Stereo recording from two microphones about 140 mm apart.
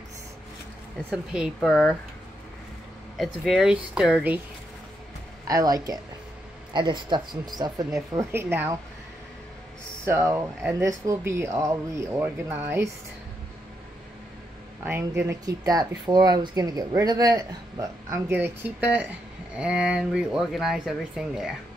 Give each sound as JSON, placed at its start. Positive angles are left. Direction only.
{"t": 1.1, "sound": "speech", "side_deg": -5}
{"t": 3.2, "sound": "speech", "side_deg": 0}
{"t": 5.5, "sound": "speech", "side_deg": -25}
{"t": 8.2, "sound": "a woman's voice", "side_deg": -15}
{"t": 10.0, "sound": "speech", "side_deg": -20}
{"t": 14.9, "sound": "speech", "side_deg": -15}